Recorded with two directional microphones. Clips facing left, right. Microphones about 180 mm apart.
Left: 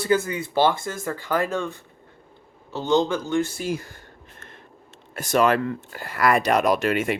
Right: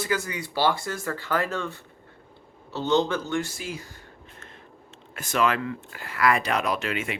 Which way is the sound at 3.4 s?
50° left (ahead or behind).